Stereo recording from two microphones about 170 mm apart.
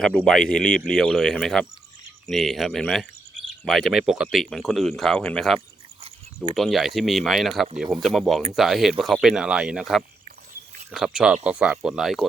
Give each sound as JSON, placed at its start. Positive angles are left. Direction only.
{"t": 0.3, "sound": "speech", "side_deg": 5}
{"t": 5.5, "sound": "a sound", "side_deg": -30}
{"t": 6.5, "sound": "speech", "side_deg": 0}